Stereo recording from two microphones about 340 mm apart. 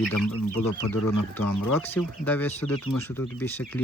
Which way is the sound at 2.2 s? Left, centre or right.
Centre.